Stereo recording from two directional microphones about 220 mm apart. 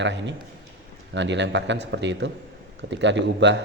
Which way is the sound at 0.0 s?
55° right (ahead or behind).